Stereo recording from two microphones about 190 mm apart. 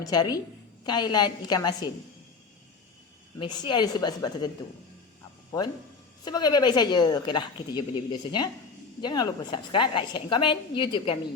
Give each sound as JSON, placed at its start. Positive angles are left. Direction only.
{"t": 0.0, "sound": "a woman's voice", "side_deg": 20}
{"t": 3.3, "sound": "a woman's voice", "side_deg": 25}
{"t": 5.5, "sound": "a woman's voice", "side_deg": 20}